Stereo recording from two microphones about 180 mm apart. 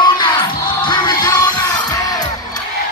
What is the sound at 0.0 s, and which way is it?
Music, 25° left (ahead or behind).